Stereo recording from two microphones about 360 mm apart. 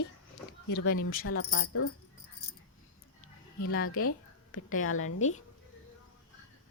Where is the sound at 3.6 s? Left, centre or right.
Left.